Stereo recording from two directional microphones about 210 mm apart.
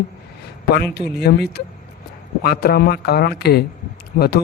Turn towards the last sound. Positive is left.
turn(degrees=45)  # may be behind; listen again after turning